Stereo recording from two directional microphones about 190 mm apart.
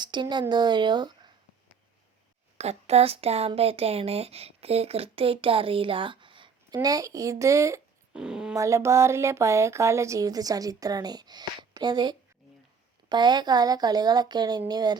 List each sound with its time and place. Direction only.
0.0 s speech: 25° right (ahead or behind)
2.6 s speech: 35° right (ahead or behind); by 7.8 s 15° right (ahead or behind)
8.1 s speech: 5° right (ahead or behind)
8.5 s speech: 15° right (ahead or behind)